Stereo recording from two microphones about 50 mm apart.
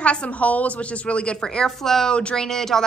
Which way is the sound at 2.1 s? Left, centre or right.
Centre.